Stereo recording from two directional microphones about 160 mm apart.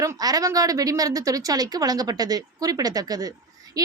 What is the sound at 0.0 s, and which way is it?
A woman's voice, 20° right (ahead or behind).